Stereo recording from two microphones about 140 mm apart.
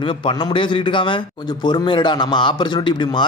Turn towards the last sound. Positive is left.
turn(degrees=35)  # may be behind; listen again after turning